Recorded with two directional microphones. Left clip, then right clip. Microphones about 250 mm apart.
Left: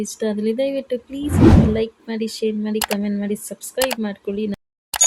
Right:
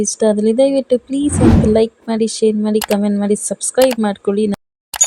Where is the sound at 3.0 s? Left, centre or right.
Centre.